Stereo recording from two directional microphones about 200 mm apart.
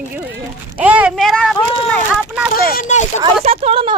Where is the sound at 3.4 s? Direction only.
30° right (ahead or behind).